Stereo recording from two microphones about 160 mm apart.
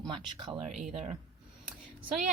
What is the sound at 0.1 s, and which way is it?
Speech, 30° right (ahead or behind).